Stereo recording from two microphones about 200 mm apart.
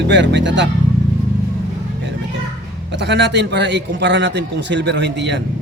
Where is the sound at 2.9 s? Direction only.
60° right (ahead or behind).